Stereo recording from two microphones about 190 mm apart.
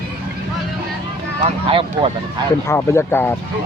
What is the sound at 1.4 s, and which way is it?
Speech, 30° right (ahead or behind).